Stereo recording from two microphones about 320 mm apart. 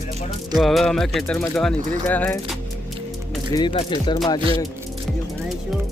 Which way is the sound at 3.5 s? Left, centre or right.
Centre.